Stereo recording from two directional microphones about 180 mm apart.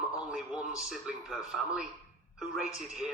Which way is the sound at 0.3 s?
5° right (ahead or behind).